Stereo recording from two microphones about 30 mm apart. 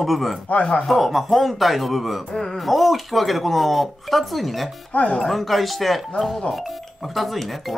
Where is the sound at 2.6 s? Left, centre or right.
Centre.